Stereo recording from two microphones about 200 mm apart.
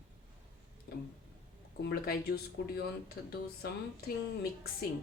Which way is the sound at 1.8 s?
50° left (ahead or behind).